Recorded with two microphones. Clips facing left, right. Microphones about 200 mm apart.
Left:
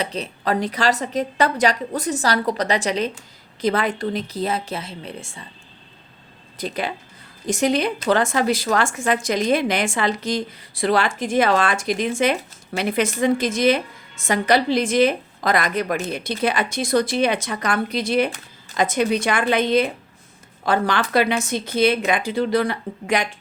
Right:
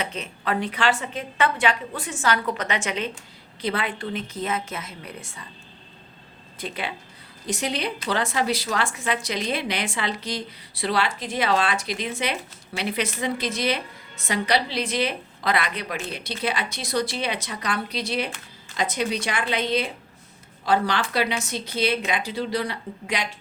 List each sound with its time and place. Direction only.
0.0 s a woman's voice: 35° left (ahead or behind)
6.6 s a woman's voice: 40° left (ahead or behind)